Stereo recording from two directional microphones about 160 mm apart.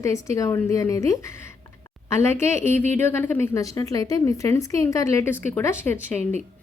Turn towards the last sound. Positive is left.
turn(degrees=5)  # may be behind; listen again after turning